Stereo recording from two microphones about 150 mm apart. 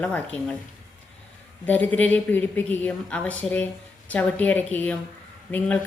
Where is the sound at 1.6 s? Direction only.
10° left (ahead or behind).